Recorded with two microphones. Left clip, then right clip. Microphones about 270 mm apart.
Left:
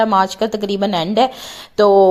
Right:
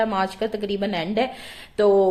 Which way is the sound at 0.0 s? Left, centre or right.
Left.